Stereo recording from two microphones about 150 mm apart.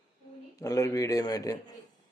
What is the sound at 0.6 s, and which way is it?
Speech, 20° left (ahead or behind).